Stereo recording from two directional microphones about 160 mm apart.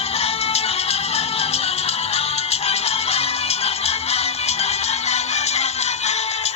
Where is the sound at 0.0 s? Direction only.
40° left (ahead or behind).